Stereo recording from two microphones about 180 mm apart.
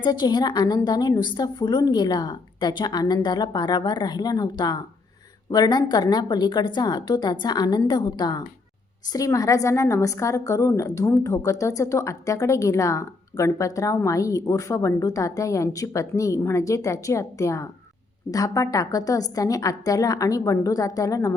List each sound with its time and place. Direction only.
0.0 s a woman's voice: 25° left (ahead or behind)